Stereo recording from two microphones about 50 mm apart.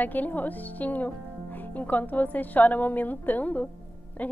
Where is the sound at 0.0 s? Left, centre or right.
Left.